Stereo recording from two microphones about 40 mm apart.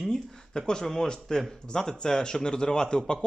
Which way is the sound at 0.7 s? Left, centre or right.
Centre.